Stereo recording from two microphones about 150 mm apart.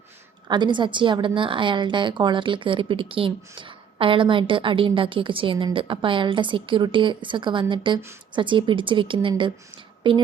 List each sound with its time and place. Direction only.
0.4 s a woman's voice: 30° right (ahead or behind)